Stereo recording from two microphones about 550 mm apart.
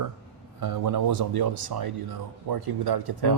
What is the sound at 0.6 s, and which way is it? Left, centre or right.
Speech, right.